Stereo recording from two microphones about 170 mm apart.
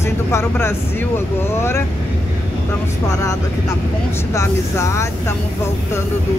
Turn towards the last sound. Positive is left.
turn(degrees=20)  # may be behind; listen again after turning